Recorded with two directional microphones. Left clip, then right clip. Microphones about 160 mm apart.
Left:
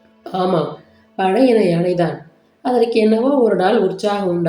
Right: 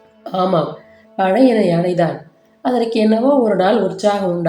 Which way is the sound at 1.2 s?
50° right (ahead or behind).